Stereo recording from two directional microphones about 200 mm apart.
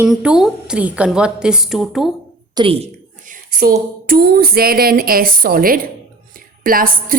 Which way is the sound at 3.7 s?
50° right (ahead or behind).